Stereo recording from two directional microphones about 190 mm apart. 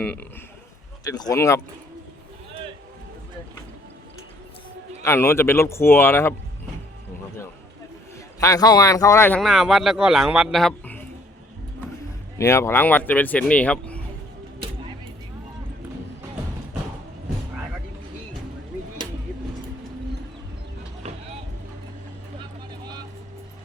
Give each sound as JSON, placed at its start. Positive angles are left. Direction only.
{"t": 0.0, "sound": "a man's voice", "side_deg": 5}
{"t": 1.0, "sound": "speech", "side_deg": 20}
{"t": 5.0, "sound": "speech", "side_deg": 15}
{"t": 8.4, "sound": "speech", "side_deg": 20}
{"t": 9.4, "sound": "a man's voice", "side_deg": 0}
{"t": 12.4, "sound": "speech", "side_deg": 15}